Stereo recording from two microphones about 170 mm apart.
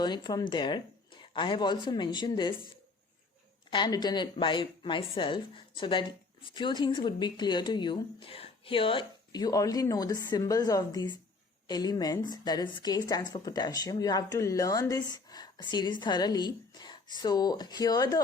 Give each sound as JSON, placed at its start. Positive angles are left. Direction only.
{"t": 0.0, "sound": "speech", "side_deg": 25}
{"t": 3.7, "sound": "speech", "side_deg": 25}